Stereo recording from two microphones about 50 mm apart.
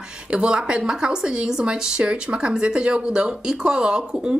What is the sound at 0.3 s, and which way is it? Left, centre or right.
Speech, centre.